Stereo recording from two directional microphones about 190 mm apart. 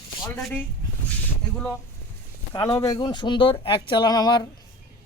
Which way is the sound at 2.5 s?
20° left (ahead or behind).